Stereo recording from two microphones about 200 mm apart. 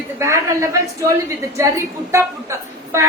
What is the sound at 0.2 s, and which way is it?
Speech, 15° right (ahead or behind).